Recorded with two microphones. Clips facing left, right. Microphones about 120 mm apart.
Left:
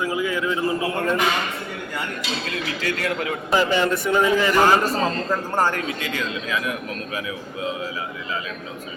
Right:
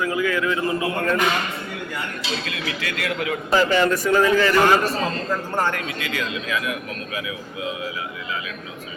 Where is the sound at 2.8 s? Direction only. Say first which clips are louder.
Left 2 dB; 30° left (ahead or behind).